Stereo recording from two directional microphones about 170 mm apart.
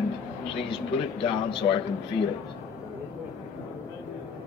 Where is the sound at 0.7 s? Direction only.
30° left (ahead or behind).